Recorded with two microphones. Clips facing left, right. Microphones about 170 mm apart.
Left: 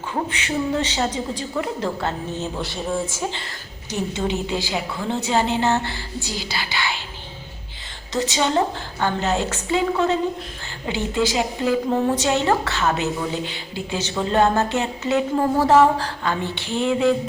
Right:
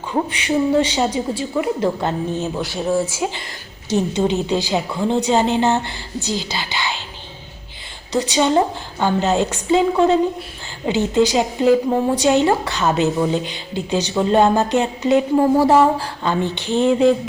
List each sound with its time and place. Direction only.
0.1 s a woman's voice: 15° right (ahead or behind)
2.6 s speech: 5° right (ahead or behind)
3.9 s a woman's voice: 20° right (ahead or behind)
8.1 s a woman's voice: 10° right (ahead or behind)
10.8 s a woman's voice: 20° right (ahead or behind)